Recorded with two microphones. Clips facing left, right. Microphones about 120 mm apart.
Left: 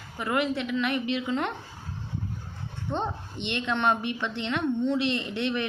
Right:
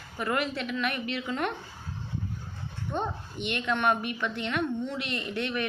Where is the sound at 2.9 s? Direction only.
25° left (ahead or behind).